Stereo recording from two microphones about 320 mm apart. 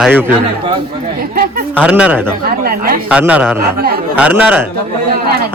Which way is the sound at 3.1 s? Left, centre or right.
Centre.